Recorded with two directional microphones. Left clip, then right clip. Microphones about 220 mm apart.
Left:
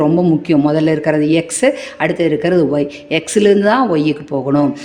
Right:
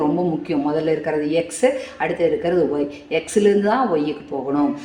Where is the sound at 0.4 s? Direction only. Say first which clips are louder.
Left 7 dB; 50° left (ahead or behind).